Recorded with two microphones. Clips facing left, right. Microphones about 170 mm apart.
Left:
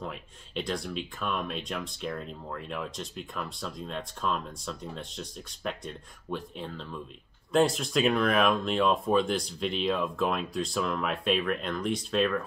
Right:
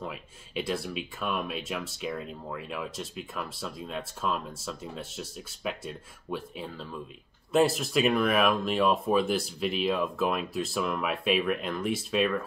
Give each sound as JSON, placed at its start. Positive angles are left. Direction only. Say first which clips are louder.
{"t": 0.0, "sound": "speech", "louder": "even", "side_deg": -5}